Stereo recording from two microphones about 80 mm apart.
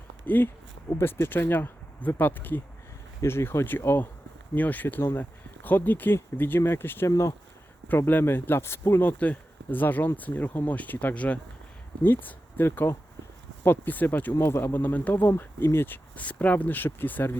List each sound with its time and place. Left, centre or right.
0.3 s speech: left
7.1 s speech: left
7.9 s speech: left
16.1 s speech: centre